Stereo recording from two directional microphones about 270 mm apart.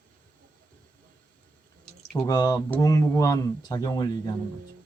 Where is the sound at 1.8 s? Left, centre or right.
Centre.